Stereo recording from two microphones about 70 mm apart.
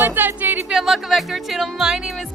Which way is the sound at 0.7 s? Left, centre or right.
Centre.